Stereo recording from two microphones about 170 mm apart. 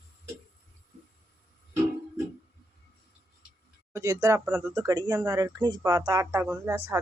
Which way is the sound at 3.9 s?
20° right (ahead or behind).